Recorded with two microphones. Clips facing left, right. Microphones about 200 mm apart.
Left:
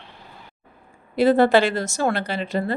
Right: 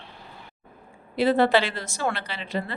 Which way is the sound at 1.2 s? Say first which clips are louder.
Left 4 dB; 45° left (ahead or behind).